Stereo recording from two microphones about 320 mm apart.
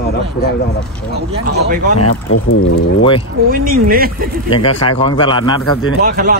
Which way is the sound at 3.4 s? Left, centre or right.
Right.